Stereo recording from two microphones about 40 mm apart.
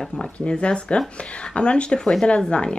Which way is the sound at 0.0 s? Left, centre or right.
Centre.